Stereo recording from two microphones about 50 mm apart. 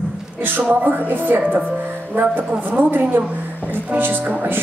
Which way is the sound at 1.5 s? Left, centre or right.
Right.